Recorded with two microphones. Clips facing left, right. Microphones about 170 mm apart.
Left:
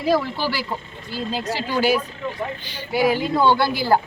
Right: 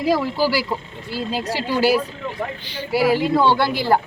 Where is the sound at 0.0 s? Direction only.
10° right (ahead or behind).